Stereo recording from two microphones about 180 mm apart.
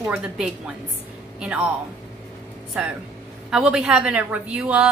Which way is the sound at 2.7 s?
5° right (ahead or behind).